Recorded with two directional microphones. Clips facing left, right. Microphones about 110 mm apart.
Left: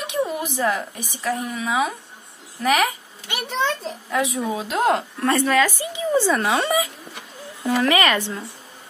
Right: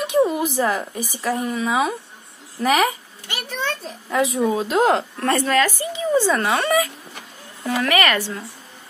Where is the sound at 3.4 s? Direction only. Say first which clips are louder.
Left 4 dB; 20° left (ahead or behind).